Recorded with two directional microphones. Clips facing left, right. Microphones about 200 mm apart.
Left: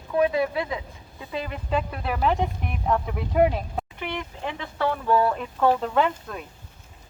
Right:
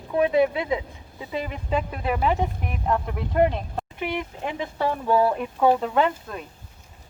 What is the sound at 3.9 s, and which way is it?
Speech, 10° right (ahead or behind).